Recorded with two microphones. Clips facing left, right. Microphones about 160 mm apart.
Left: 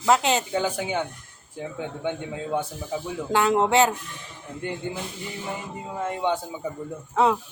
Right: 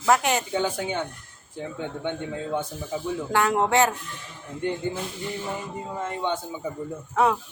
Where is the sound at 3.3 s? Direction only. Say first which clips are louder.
Left 2 dB; 20° left (ahead or behind).